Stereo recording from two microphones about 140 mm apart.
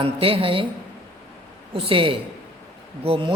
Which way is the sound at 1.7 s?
40° right (ahead or behind).